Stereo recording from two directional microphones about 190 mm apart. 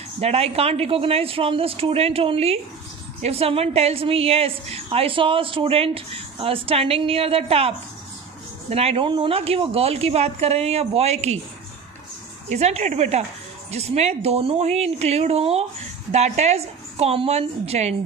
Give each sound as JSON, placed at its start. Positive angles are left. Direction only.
{"t": 0.2, "sound": "a woman's voice", "side_deg": -35}
{"t": 12.4, "sound": "a woman's voice", "side_deg": -35}